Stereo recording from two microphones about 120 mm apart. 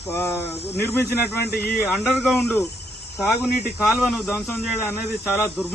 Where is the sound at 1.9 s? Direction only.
Centre (ahead or behind).